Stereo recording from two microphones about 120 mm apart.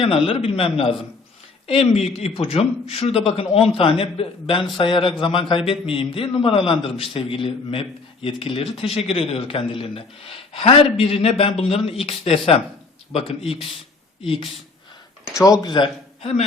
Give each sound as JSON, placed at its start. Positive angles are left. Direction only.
{"t": 0.0, "sound": "a man's voice", "side_deg": 50}
{"t": 15.4, "sound": "a man's voice", "side_deg": 30}